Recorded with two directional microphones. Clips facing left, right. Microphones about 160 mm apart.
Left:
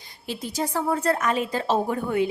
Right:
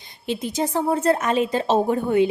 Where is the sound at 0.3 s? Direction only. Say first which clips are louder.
Right 4 dB; 20° right (ahead or behind).